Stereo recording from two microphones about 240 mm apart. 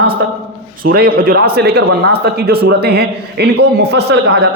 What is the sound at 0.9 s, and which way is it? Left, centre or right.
A man's voice, right.